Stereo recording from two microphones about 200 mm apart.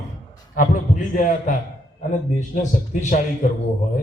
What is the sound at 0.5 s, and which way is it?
A man's voice, 40° left (ahead or behind).